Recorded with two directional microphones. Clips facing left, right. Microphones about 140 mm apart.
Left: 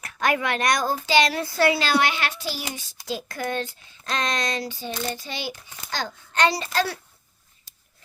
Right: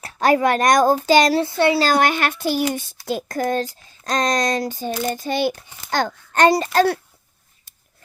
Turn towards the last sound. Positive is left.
turn(degrees=-50)  # may be behind; listen again after turning